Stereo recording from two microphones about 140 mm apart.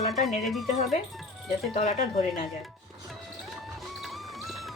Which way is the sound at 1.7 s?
55° left (ahead or behind).